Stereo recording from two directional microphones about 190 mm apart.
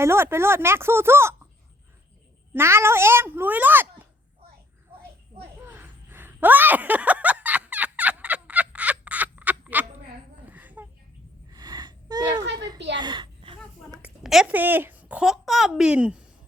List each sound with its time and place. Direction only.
0.0 s speech: 15° right (ahead or behind)
2.5 s speech: 15° right (ahead or behind)
5.6 s a sound: 10° right (ahead or behind)
11.5 s gasp: 20° right (ahead or behind)
12.5 s a sound: 20° right (ahead or behind)
14.0 s a woman's voice: 5° right (ahead or behind)